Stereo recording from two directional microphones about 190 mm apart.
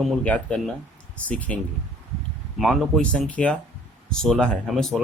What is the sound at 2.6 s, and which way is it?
Speech, centre (ahead or behind).